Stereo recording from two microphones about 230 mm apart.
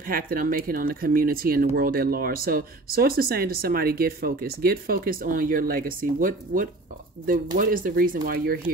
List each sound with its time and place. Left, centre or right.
0.0 s speech: right